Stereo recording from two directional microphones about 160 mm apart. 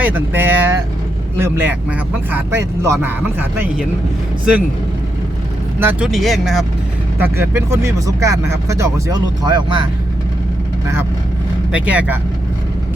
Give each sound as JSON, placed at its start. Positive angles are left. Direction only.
{"t": 0.0, "sound": "speech", "side_deg": -10}
{"t": 5.8, "sound": "speech", "side_deg": -15}
{"t": 6.1, "sound": "speech", "side_deg": 0}
{"t": 7.2, "sound": "speech", "side_deg": -15}
{"t": 11.7, "sound": "speech", "side_deg": -10}